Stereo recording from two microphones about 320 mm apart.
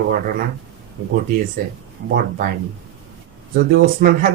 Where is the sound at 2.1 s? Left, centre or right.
Right.